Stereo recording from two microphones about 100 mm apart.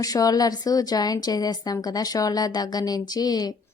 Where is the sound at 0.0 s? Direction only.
35° left (ahead or behind).